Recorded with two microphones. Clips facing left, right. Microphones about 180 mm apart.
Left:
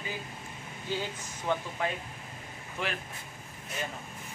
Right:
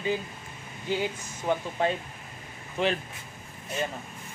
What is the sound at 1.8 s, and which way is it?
Speech, 30° right (ahead or behind).